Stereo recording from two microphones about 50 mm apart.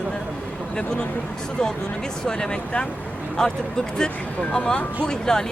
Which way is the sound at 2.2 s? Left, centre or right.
Centre.